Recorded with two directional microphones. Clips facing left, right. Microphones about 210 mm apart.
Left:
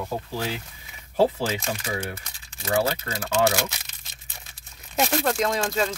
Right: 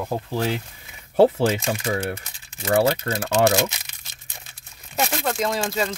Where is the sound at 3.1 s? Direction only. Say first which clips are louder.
Right 6 dB; 50° right (ahead or behind).